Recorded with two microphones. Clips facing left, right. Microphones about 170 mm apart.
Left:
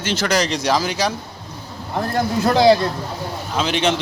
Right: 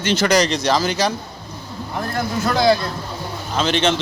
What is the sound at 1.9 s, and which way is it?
Speech, 35° left (ahead or behind).